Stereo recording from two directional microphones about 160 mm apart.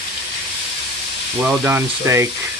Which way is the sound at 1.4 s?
10° right (ahead or behind).